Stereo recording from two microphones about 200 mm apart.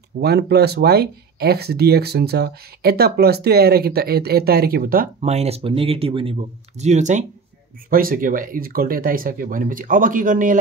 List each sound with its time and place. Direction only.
0.2 s speech: 55° right (ahead or behind)
5.2 s speech: 30° right (ahead or behind)